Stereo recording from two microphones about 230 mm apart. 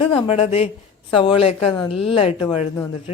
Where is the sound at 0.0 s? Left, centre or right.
Left.